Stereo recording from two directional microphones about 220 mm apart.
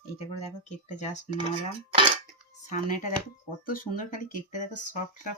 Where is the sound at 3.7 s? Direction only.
35° left (ahead or behind).